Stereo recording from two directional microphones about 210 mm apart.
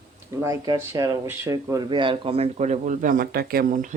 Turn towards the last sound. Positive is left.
turn(degrees=-40)  # may be behind; listen again after turning